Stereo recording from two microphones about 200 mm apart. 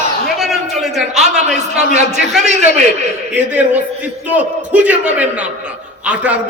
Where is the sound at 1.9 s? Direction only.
35° right (ahead or behind).